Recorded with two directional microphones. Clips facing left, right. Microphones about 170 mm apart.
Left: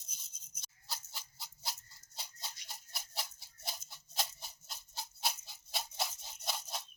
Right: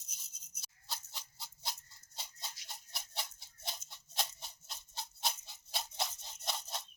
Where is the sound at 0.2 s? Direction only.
Centre (ahead or behind).